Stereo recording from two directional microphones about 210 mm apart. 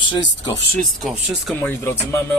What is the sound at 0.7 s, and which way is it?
Speech, centre (ahead or behind).